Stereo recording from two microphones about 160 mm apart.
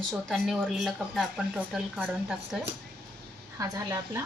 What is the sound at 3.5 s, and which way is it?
Speech, 20° right (ahead or behind).